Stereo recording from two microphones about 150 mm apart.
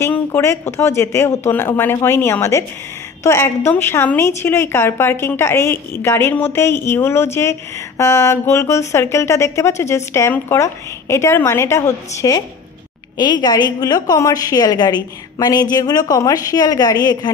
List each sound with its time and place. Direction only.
0.0 s a woman's voice: 15° left (ahead or behind)